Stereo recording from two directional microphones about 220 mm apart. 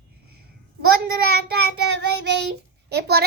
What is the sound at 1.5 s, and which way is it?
A woman's voice, 50° right (ahead or behind).